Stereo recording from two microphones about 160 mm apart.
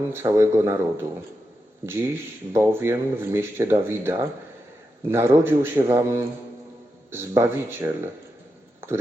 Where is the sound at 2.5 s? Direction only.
15° right (ahead or behind).